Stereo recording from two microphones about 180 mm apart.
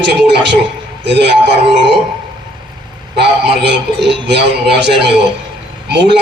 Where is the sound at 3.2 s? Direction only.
65° right (ahead or behind).